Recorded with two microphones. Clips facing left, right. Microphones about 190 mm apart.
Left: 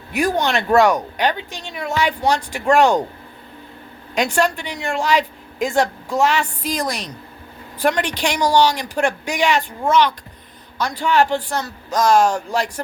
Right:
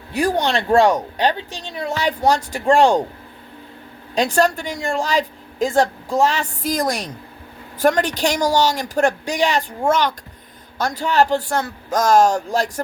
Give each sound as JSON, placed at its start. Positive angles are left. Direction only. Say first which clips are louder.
{"t": 0.1, "sound": "speech", "louder": "even", "side_deg": -30}
{"t": 4.1, "sound": "speech", "louder": "right 2 dB", "side_deg": -35}